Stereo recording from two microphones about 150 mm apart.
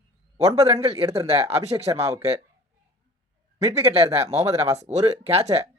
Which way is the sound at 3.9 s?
45° right (ahead or behind).